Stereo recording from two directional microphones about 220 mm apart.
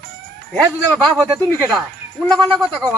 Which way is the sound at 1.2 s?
15° right (ahead or behind).